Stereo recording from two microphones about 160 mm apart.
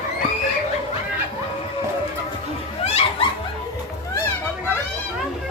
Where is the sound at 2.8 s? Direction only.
40° left (ahead or behind).